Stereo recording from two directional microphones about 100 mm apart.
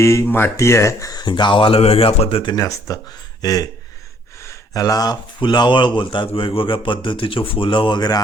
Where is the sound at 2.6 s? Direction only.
35° left (ahead or behind).